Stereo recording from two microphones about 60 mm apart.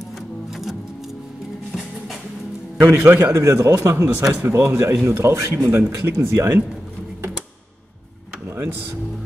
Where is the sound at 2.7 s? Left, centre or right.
Right.